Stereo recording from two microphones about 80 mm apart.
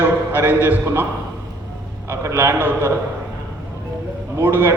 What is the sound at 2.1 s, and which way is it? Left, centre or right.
Speech, right.